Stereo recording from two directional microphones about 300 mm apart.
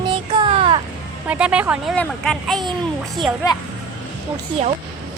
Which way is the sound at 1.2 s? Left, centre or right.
Centre.